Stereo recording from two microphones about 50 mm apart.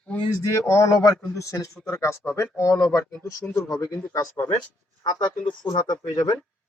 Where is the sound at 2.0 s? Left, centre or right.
Left.